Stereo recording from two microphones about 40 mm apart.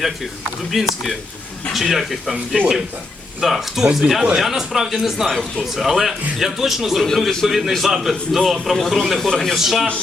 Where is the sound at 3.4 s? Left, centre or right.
Centre.